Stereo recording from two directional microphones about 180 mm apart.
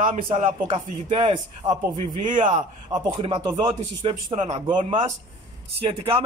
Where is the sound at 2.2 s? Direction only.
45° right (ahead or behind).